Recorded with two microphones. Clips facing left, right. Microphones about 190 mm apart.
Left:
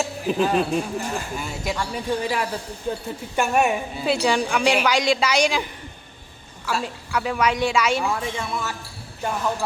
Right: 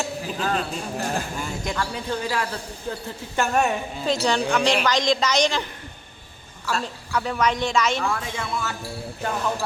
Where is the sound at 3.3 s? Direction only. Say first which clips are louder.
Left 2 dB; 10° left (ahead or behind).